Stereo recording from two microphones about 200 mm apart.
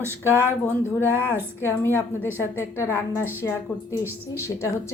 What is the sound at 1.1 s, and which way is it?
Speech, 10° right (ahead or behind).